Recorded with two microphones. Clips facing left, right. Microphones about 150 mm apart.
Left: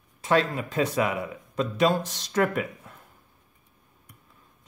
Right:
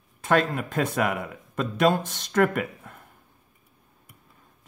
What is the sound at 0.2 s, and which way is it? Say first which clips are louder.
Speech: right 1 dB; 55° right (ahead or behind).